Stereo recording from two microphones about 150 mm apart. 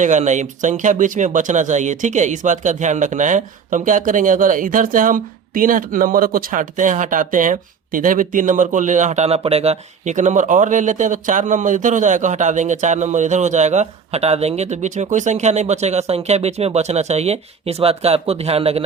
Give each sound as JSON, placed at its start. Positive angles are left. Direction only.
{"t": 0.0, "sound": "speech", "side_deg": -55}